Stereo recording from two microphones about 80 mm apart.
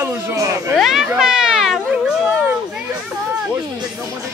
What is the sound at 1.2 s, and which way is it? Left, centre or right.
Children playing, centre.